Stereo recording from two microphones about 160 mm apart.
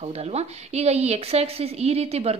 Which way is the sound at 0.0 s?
40° right (ahead or behind).